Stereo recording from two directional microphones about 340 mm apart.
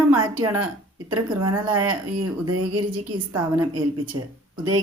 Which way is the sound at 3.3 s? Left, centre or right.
Centre.